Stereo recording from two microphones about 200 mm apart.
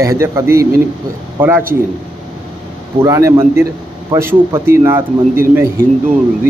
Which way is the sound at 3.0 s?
15° right (ahead or behind).